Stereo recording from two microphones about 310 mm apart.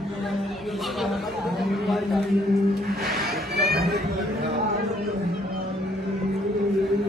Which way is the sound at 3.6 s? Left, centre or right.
Right.